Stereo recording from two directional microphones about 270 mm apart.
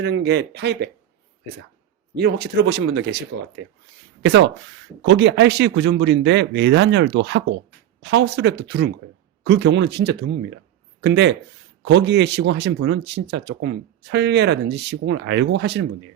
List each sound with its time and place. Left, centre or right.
0.0 s speech: right
2.1 s speech: right